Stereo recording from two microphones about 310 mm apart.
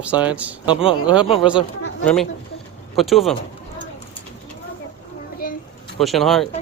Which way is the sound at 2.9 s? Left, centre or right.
Centre.